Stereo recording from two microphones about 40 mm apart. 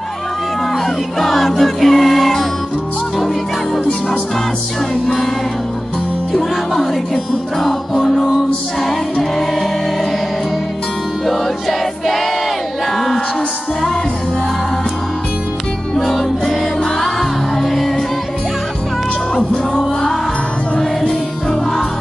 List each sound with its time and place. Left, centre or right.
0.8 s music: centre
5.0 s music: centre
6.3 s music: centre
12.9 s music: centre
16.0 s music: centre
19.3 s music: centre